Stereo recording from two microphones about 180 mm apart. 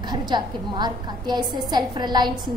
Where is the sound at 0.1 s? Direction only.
25° right (ahead or behind).